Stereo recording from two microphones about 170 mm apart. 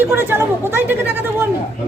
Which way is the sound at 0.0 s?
15° right (ahead or behind).